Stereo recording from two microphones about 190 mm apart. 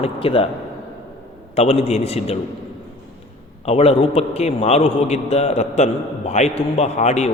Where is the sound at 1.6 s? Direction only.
35° left (ahead or behind).